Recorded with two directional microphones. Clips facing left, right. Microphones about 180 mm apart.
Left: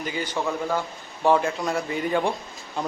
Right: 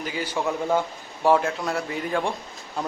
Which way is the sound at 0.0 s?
5° right (ahead or behind).